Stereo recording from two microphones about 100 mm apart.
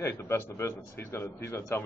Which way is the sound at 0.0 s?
25° left (ahead or behind).